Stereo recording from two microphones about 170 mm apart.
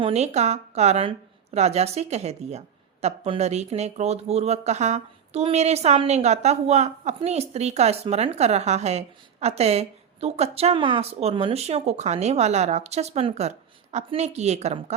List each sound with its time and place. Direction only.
0.0 s a woman's voice: 40° right (ahead or behind)